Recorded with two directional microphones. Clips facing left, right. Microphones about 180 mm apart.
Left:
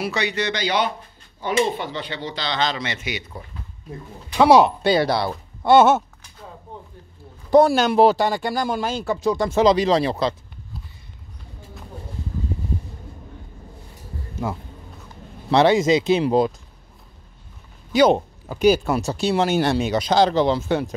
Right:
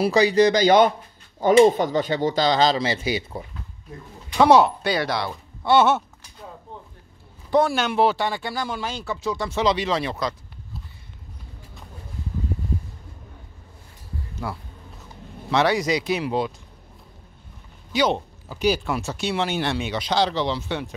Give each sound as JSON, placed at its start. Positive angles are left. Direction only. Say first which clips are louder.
{"t": 0.0, "sound": "speech", "louder": "right 8 dB", "side_deg": -35}
{"t": 4.4, "sound": "speech", "louder": "left 2 dB", "side_deg": 15}
{"t": 4.8, "sound": "speech", "louder": "left 5 dB", "side_deg": 30}
{"t": 7.5, "sound": "speech", "louder": "left 5 dB", "side_deg": 40}
{"t": 14.4, "sound": "speech", "louder": "left 5 dB", "side_deg": 20}
{"t": 17.9, "sound": "speech", "louder": "left 6 dB", "side_deg": 50}